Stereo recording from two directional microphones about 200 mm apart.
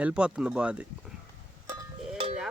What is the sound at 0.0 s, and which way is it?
Speech, 5° right (ahead or behind).